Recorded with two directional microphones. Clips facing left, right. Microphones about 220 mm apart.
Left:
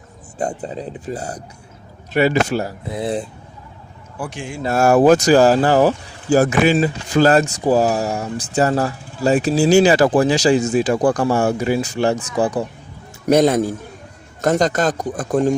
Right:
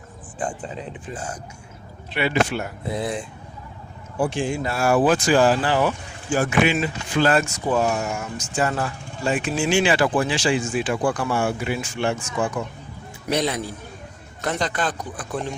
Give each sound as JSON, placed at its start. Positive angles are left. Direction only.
{"t": 0.3, "sound": "speech", "side_deg": 40}
{"t": 4.2, "sound": "speech", "side_deg": -30}
{"t": 4.6, "sound": "speech", "side_deg": 45}
{"t": 13.2, "sound": "a man's voice", "side_deg": 45}